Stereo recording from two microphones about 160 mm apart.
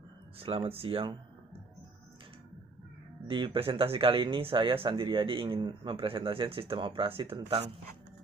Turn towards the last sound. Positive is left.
turn(degrees=-35)  # may be behind; listen again after turning